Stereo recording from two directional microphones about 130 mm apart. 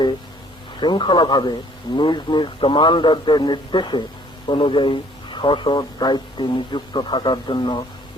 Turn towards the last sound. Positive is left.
turn(degrees=35)  # may be behind; listen again after turning